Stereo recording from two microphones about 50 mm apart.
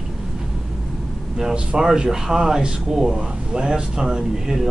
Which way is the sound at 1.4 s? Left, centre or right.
Centre.